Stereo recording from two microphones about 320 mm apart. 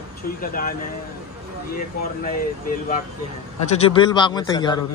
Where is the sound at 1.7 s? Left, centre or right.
Left.